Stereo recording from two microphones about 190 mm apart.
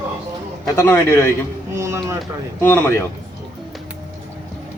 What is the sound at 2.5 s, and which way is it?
Speech, 10° left (ahead or behind).